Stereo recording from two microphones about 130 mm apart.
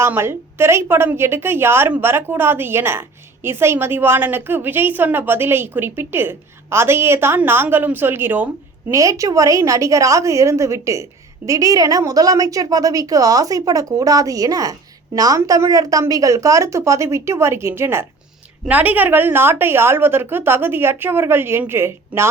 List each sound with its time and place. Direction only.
0.0 s a woman's voice: 20° right (ahead or behind)